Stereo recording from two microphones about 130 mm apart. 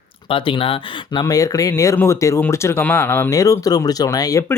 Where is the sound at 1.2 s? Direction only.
25° left (ahead or behind).